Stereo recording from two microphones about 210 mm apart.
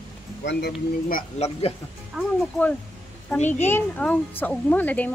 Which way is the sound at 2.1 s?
5° left (ahead or behind).